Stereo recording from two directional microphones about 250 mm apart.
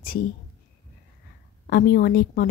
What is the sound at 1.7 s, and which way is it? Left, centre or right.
Speech, left.